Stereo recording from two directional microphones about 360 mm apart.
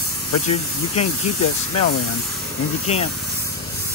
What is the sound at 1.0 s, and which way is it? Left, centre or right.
Speech, left.